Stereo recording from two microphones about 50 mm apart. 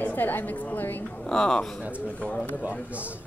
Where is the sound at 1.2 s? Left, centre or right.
Centre.